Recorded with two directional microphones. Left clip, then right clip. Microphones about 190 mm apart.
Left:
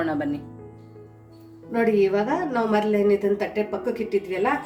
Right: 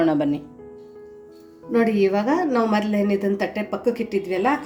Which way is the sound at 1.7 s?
50° right (ahead or behind).